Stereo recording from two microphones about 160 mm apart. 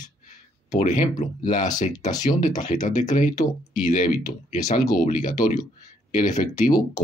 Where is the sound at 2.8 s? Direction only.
50° left (ahead or behind).